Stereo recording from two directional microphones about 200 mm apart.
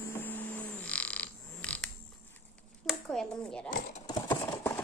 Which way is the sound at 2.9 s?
5° left (ahead or behind).